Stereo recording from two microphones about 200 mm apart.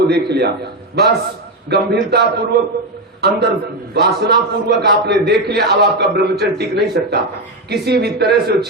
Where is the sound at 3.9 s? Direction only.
55° right (ahead or behind).